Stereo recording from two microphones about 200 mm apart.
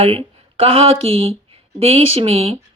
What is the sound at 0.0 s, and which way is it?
A woman's voice, 30° right (ahead or behind).